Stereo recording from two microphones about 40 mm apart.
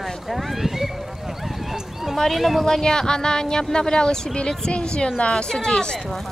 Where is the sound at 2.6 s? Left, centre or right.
Centre.